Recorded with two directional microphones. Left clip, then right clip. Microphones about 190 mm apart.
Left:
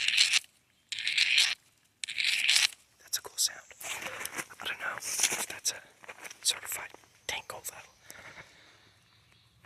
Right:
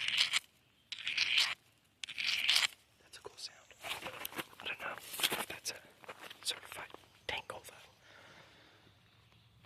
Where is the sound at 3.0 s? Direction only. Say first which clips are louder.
Left 16 dB; 10° left (ahead or behind).